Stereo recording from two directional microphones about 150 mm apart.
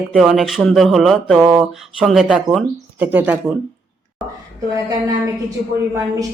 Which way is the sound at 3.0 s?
10° right (ahead or behind).